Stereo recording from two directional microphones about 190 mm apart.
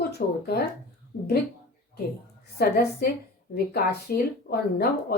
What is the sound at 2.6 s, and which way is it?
A woman's voice, 50° left (ahead or behind).